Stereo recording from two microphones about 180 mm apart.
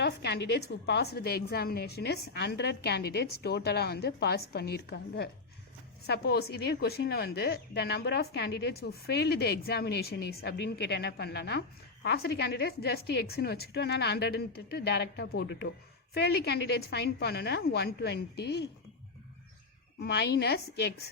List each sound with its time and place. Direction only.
0.0 s a woman's voice: 70° left (ahead or behind)
20.0 s a woman's voice: 65° left (ahead or behind)